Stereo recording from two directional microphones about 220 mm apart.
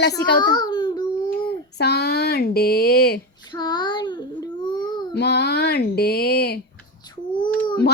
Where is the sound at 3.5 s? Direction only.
20° left (ahead or behind).